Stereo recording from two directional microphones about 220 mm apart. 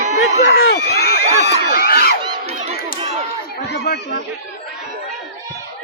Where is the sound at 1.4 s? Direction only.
45° left (ahead or behind).